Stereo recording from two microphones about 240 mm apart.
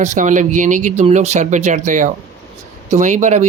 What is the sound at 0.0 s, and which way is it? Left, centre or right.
Speech, right.